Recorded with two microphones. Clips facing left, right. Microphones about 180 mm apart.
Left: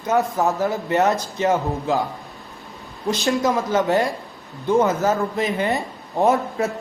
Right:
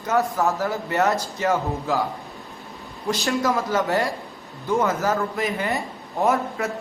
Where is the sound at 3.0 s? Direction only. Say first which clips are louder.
Left 3 dB; 20° left (ahead or behind).